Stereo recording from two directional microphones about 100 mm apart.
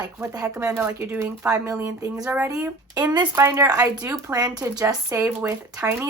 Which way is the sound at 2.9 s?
40° right (ahead or behind).